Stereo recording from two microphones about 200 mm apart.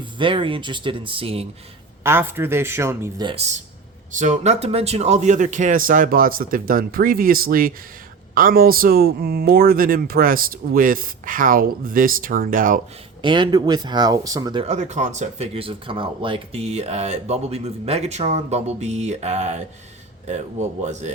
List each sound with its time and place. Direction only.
0.0 s speech: 25° right (ahead or behind)
2.0 s a man's voice: 10° right (ahead or behind); by 12.8 s 40° right (ahead or behind)
13.2 s speech: 25° right (ahead or behind)